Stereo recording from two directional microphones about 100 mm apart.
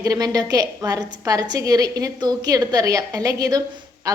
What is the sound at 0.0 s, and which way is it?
A woman's voice, 35° right (ahead or behind).